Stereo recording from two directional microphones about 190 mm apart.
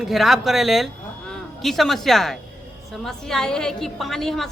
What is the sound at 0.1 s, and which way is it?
A woman's voice, centre (ahead or behind).